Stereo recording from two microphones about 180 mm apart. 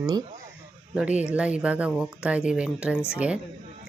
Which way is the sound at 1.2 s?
5° right (ahead or behind).